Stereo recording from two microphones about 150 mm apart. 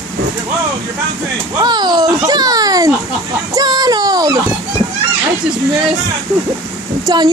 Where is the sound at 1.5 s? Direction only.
30° right (ahead or behind).